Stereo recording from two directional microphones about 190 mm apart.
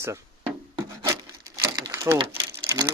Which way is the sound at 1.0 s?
15° right (ahead or behind).